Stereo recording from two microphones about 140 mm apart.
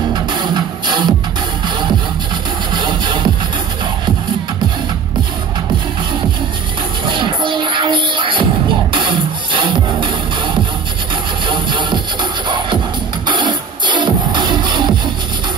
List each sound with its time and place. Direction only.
0.1 s music: 35° right (ahead or behind)
2.7 s music: 35° right (ahead or behind)
7.1 s music: 35° right (ahead or behind)